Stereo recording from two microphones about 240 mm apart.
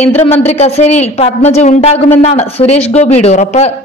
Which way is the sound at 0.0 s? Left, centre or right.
Left.